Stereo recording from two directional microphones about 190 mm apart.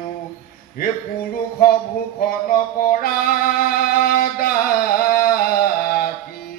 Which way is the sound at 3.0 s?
50° left (ahead or behind).